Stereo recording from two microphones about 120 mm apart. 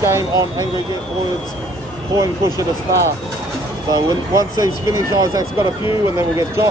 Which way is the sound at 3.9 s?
30° right (ahead or behind).